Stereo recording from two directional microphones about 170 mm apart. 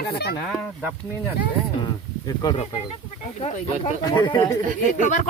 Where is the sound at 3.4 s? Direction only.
40° left (ahead or behind).